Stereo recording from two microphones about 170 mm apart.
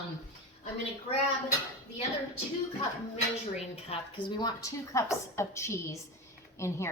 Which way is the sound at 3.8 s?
25° left (ahead or behind).